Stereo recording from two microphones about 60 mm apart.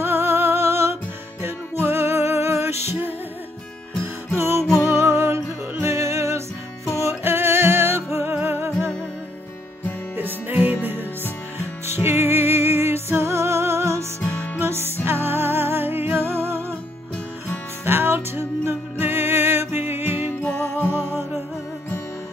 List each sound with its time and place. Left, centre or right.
0.0 s music: right
4.8 s music: right
10.5 s music: right
15.0 s music: right
17.8 s music: right
20.4 s music: centre
20.8 s music: right